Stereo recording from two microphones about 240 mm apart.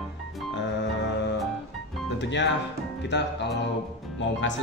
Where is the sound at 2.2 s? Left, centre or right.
Left.